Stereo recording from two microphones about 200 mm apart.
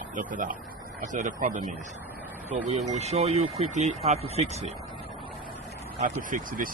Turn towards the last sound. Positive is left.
turn(degrees=-45)  # may be behind; listen again after turning